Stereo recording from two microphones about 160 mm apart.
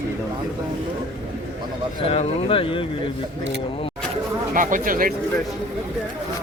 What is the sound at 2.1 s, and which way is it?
Speech, 35° left (ahead or behind).